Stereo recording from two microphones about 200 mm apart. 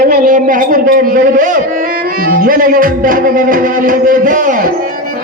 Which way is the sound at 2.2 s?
45° right (ahead or behind).